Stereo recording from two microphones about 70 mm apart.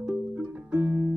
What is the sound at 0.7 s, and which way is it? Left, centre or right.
Music, right.